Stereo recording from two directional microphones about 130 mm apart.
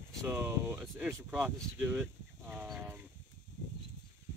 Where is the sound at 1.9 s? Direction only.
15° right (ahead or behind).